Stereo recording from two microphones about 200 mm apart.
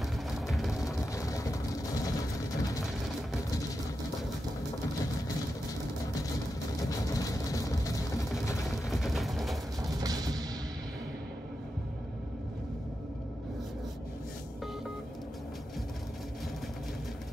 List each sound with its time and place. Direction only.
0.5 s vehicle: centre (ahead or behind)
0.8 s vehicle: 15° left (ahead or behind)
6.9 s vehicle: 15° left (ahead or behind)
8.6 s a sound: centre (ahead or behind)
9.8 s music: 20° right (ahead or behind)